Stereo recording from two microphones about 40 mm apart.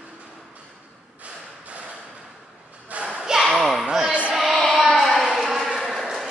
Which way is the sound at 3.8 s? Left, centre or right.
Centre.